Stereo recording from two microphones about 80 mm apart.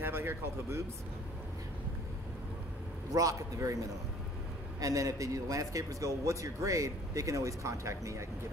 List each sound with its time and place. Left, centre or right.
0.0 s speech: right
3.1 s speech: right
4.7 s speech: right